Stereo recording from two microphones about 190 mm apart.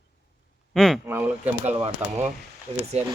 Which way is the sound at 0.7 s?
Centre (ahead or behind).